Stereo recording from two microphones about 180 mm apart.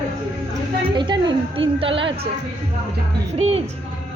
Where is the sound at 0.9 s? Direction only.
25° right (ahead or behind).